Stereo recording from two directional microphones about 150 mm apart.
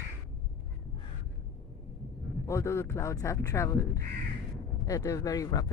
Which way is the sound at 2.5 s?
20° left (ahead or behind).